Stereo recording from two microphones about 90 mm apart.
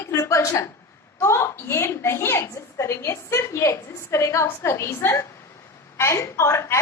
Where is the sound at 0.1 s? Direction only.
35° left (ahead or behind).